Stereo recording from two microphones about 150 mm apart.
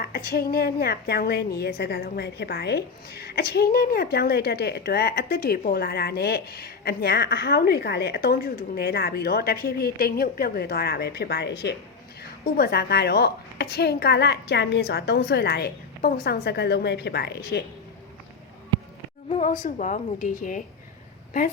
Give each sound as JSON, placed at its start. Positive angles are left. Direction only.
{"t": 0.0, "sound": "a woman's voice", "side_deg": 85}
{"t": 19.3, "sound": "a woman's voice", "side_deg": 55}